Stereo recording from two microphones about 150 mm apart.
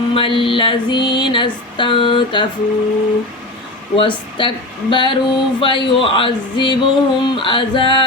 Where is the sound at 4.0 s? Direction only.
35° left (ahead or behind).